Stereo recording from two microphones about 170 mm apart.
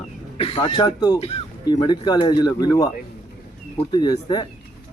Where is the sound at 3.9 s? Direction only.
25° left (ahead or behind).